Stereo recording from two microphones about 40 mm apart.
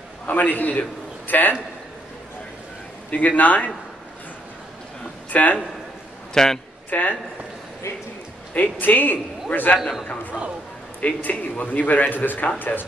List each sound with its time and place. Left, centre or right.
0.3 s a man's voice: left
3.1 s speech: left
5.3 s a man's voice: left
6.3 s speech: centre
6.9 s speech: left
8.5 s speech: left
9.8 s a man's voice: centre
11.0 s speech: left